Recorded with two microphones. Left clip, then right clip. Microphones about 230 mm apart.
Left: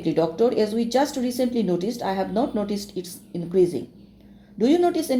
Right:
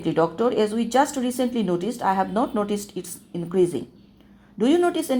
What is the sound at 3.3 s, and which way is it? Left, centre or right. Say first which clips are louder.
Speech: left 1 dB; right.